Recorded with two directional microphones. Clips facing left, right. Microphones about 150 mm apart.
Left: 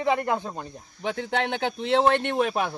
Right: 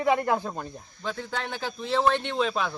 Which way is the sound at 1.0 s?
65° left (ahead or behind).